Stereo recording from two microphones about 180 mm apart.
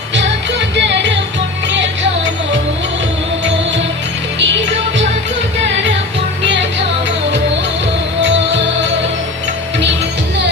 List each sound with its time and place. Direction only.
0.8 s music: 75° right (ahead or behind)
1.6 s music: 90° right